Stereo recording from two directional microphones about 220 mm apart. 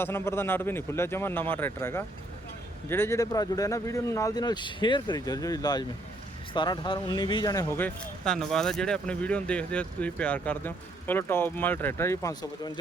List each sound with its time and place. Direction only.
0.0 s speech: 10° left (ahead or behind)